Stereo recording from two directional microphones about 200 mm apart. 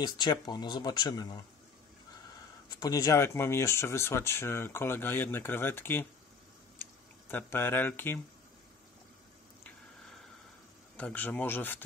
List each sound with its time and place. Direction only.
0.0 s speech: 20° left (ahead or behind)
2.8 s speech: 15° left (ahead or behind)
6.8 s tick-tock: 10° left (ahead or behind)
11.0 s speech: 5° left (ahead or behind)